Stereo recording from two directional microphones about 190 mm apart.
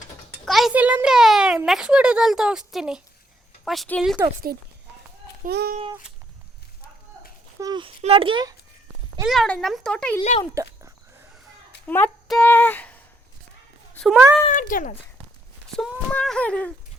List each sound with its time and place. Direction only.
0.4 s a child's voice: centre (ahead or behind)
4.5 s speech: 55° right (ahead or behind)
7.6 s a child's voice: 25° right (ahead or behind)
9.2 s speech: centre (ahead or behind)
10.2 s speech: 30° left (ahead or behind)
11.9 s speech: 10° left (ahead or behind)
14.4 s a child's voice: 45° left (ahead or behind)
15.7 s speech: centre (ahead or behind)